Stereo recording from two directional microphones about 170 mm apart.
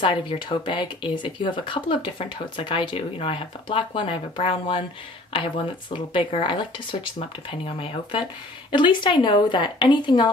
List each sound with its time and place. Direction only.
0.0 s speech: 30° left (ahead or behind)